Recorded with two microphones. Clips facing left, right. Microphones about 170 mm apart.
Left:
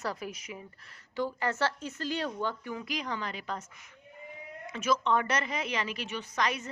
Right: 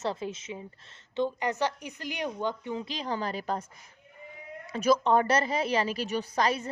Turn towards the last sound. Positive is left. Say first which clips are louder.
# right 5 dB
turn(degrees=-30)  # may be behind; listen again after turning